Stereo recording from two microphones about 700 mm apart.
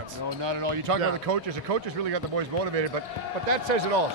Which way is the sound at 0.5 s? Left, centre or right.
Right.